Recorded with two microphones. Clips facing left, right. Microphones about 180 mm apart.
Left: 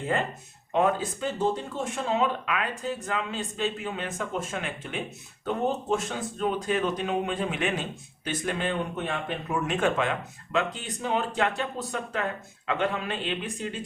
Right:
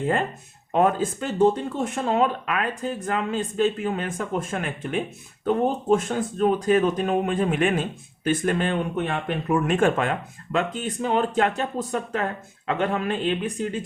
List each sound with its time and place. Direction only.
0.7 s speech: 50° right (ahead or behind)